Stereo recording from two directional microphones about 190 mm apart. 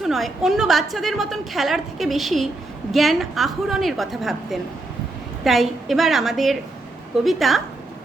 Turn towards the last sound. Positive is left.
turn(degrees=0)  # may be behind; listen again after turning